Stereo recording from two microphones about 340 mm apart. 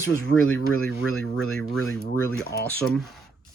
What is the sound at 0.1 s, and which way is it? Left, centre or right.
Speech, left.